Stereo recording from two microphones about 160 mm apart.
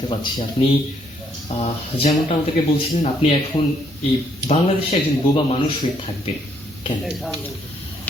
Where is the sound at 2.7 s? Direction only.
35° left (ahead or behind).